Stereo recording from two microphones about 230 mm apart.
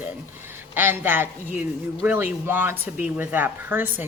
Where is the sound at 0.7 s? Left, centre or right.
Centre.